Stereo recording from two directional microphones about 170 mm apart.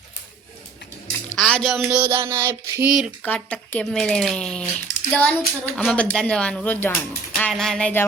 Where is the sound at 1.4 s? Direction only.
Centre (ahead or behind).